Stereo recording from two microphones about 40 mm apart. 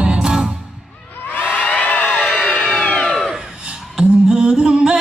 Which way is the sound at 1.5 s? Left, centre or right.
Left.